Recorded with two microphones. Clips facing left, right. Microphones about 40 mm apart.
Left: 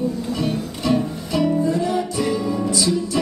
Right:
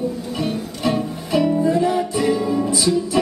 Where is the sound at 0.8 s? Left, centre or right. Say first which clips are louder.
Left 1 dB; right.